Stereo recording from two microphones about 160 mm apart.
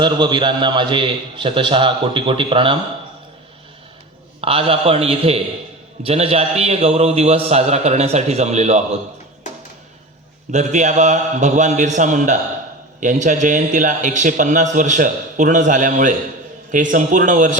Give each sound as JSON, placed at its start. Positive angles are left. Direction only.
{"t": 0.0, "sound": "a man's voice", "side_deg": -30}
{"t": 4.4, "sound": "a man's voice", "side_deg": -35}
{"t": 10.5, "sound": "a man's voice", "side_deg": -45}